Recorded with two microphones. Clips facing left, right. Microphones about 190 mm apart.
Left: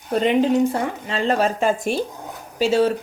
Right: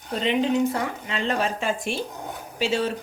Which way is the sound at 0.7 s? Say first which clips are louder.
Left 4 dB; 35° left (ahead or behind).